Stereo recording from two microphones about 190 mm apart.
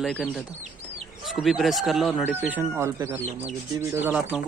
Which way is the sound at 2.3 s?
10° right (ahead or behind).